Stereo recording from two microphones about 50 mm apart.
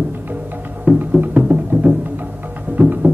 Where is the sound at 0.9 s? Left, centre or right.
Right.